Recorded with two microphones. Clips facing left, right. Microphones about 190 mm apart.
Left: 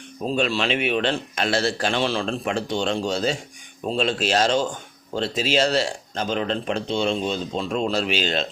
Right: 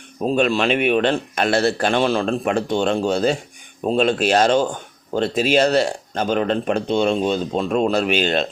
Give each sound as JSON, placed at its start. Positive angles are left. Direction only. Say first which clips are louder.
{"t": 0.2, "sound": "speech", "louder": "right 5 dB", "side_deg": -55}